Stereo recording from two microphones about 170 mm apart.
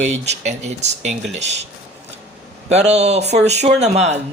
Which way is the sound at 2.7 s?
40° right (ahead or behind).